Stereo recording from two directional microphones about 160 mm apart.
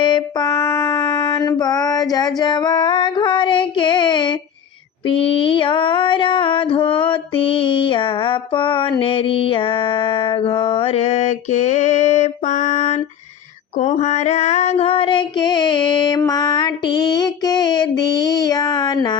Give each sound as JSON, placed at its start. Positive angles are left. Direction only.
{"t": 0.0, "sound": "music", "side_deg": 30}
{"t": 5.0, "sound": "a sound", "side_deg": 35}
{"t": 13.7, "sound": "female singing", "side_deg": 50}